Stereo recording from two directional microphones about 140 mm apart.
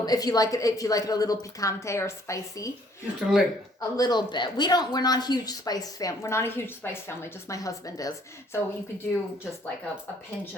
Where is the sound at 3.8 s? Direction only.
25° left (ahead or behind).